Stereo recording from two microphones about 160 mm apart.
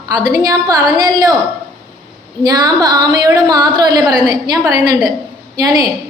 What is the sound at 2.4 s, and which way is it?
A woman's voice, 25° right (ahead or behind).